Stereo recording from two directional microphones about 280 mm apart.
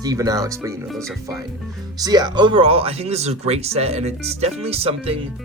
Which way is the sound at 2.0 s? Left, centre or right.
Centre.